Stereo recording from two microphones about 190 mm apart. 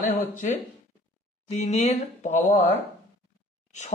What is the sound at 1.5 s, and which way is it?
Speech, 35° left (ahead or behind).